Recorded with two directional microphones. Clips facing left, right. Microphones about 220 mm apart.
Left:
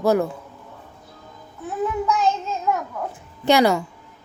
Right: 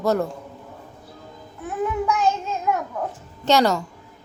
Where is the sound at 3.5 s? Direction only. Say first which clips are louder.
Left 2 dB; 10° left (ahead or behind).